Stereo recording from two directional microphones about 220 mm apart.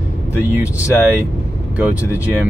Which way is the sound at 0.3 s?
5° right (ahead or behind).